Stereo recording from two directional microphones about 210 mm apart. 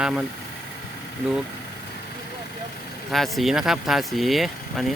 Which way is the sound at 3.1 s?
Centre (ahead or behind).